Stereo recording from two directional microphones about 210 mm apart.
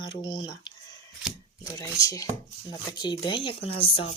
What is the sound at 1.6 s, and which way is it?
Speech, 15° left (ahead or behind).